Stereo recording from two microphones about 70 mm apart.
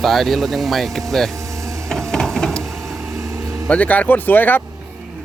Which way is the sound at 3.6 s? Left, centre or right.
Left.